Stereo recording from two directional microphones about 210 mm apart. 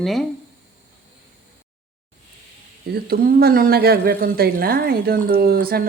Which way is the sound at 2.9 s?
45° right (ahead or behind).